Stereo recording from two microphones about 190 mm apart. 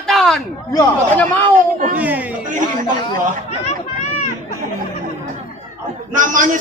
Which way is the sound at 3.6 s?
35° left (ahead or behind).